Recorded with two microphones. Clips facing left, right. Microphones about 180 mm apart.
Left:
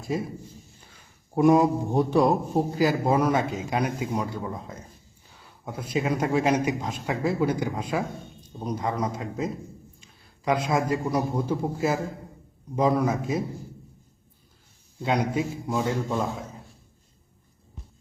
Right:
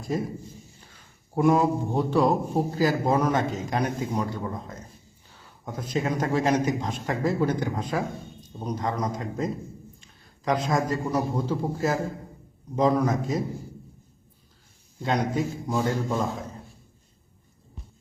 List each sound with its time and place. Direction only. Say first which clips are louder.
0.0 s a man's voice: even; 5° left (ahead or behind)
1.4 s a man's voice: left 2 dB; 20° left (ahead or behind)
15.0 s a man's voice: even; 10° left (ahead or behind)